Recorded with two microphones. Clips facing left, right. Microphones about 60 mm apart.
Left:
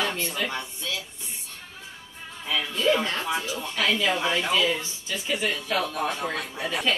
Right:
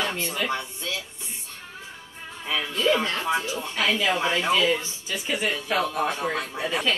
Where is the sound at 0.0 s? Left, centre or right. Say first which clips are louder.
Right 1 dB; centre.